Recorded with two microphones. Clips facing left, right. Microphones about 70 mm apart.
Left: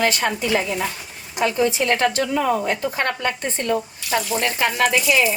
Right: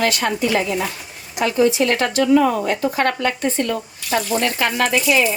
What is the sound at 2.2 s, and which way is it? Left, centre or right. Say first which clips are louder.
Speech: right 6 dB; right.